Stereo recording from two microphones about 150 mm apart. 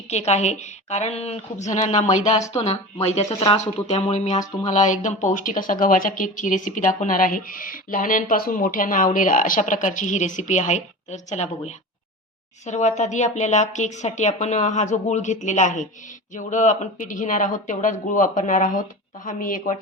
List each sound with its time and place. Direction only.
0.1 s speech: 45° left (ahead or behind); by 19.7 s 65° left (ahead or behind)